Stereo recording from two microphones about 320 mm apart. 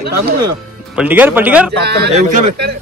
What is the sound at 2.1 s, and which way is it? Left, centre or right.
Speech, right.